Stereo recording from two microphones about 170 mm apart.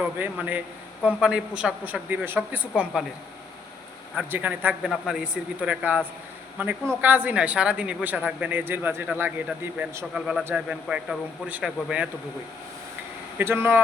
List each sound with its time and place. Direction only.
0.0 s speech: 10° right (ahead or behind)
4.1 s a man's voice: 10° right (ahead or behind)
13.4 s speech: 15° right (ahead or behind)